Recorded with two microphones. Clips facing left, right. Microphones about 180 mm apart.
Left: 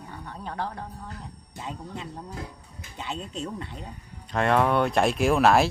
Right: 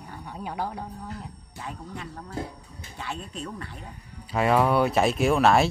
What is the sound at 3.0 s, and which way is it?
Speech, 20° left (ahead or behind).